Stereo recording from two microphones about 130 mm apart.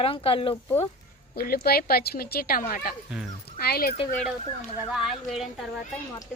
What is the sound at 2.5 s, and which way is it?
Speech, 90° left.